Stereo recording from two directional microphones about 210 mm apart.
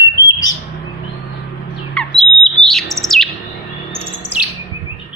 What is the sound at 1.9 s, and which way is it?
Bird, 5° left (ahead or behind).